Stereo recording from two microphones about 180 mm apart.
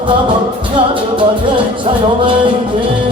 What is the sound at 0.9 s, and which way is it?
Music, 30° right (ahead or behind).